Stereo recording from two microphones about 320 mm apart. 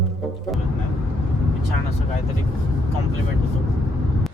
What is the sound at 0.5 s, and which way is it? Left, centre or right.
Speech, centre.